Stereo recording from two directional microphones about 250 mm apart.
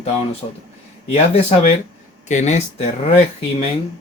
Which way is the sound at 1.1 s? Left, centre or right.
Left.